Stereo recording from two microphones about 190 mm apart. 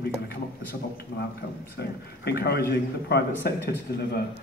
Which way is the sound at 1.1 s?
60° left (ahead or behind).